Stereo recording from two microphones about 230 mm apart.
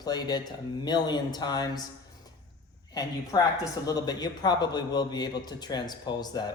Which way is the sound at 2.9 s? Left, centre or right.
Centre.